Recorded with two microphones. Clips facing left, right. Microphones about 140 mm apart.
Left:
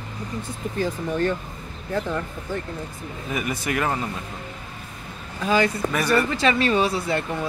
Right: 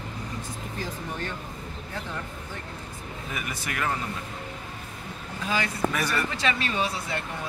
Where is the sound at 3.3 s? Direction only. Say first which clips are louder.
Left 8 dB; 20° left (ahead or behind).